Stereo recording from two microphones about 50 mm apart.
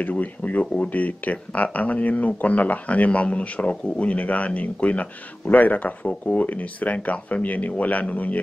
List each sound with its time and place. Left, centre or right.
0.0 s speech: left